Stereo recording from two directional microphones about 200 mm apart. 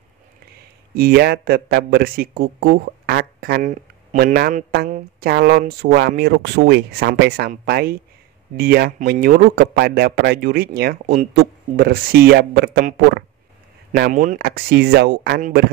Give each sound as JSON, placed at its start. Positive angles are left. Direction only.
{"t": 0.9, "sound": "speech", "side_deg": -50}